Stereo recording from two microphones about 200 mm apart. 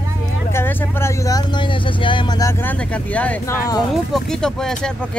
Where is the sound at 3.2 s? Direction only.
5° left (ahead or behind).